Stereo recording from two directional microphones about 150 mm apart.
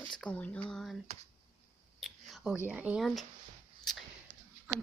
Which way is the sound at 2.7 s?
5° right (ahead or behind).